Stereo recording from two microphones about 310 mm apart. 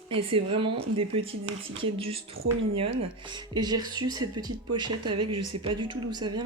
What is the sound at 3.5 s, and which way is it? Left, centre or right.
Speech, centre.